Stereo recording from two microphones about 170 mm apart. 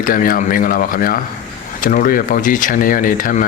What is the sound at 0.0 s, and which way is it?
Speech, 55° left (ahead or behind).